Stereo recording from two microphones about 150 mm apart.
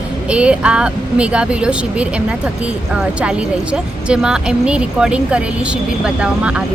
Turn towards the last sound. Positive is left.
turn(degrees=-5)  # may be behind; listen again after turning